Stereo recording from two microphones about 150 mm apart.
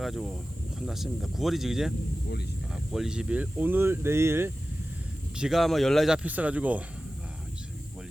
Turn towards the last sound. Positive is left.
turn(degrees=-10)  # may be behind; listen again after turning